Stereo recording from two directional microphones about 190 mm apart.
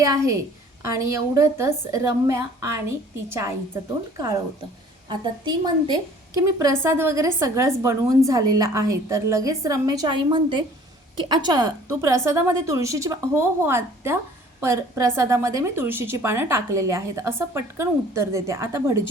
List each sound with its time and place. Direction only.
0.0 s a woman's voice: 20° right (ahead or behind)
5.0 s a woman's voice: 20° right (ahead or behind)